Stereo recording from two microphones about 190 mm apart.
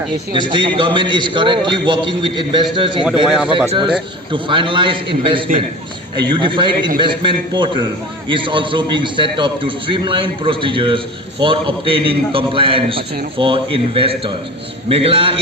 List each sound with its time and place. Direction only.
0.3 s a man's voice: 25° right (ahead or behind)
3.2 s speech: 5° right (ahead or behind)
3.7 s a man's voice: 25° right (ahead or behind)